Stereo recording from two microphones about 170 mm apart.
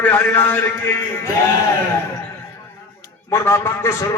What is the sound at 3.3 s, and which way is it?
Speech, 15° left (ahead or behind).